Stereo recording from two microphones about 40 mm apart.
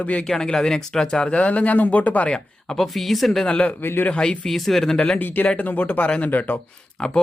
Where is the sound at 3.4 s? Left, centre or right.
Left.